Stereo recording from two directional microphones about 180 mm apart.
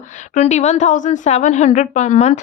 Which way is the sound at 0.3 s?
40° left (ahead or behind).